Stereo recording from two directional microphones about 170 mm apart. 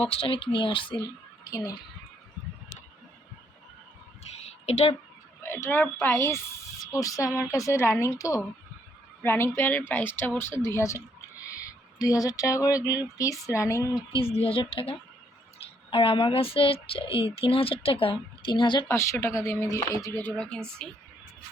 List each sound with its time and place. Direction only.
0.0 s speech: 35° left (ahead or behind)
4.6 s speech: 40° left (ahead or behind)
5.4 s a woman's voice: 15° left (ahead or behind)
14.1 s speech: 35° left (ahead or behind)
18.9 s a woman's voice: 15° left (ahead or behind)